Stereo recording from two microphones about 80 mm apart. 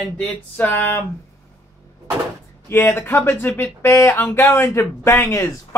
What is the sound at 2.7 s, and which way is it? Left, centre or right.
Speech, left.